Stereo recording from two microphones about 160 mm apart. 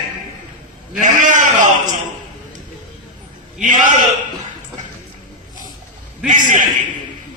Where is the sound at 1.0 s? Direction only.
55° right (ahead or behind).